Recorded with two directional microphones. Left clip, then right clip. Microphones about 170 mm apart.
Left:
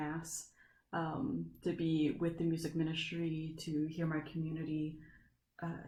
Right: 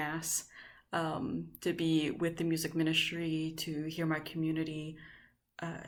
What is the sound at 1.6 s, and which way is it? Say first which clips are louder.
Speech: right 3 dB; 20° right (ahead or behind).